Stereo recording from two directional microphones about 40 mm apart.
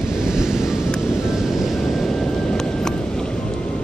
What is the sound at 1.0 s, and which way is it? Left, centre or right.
Vehicle, centre.